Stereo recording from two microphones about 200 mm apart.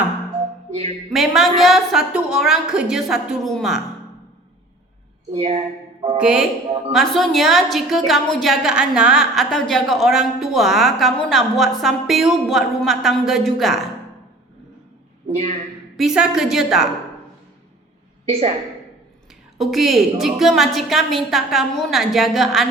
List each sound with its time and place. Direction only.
1.1 s a woman's voice: centre (ahead or behind)
5.3 s speech: 30° right (ahead or behind)
6.1 s a woman's voice: 5° right (ahead or behind)
16.0 s a woman's voice: centre (ahead or behind)
18.3 s a woman's voice: 35° right (ahead or behind)
19.5 s a woman's voice: centre (ahead or behind)